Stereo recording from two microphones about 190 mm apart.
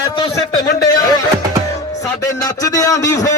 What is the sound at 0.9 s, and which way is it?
Speech, 20° left (ahead or behind).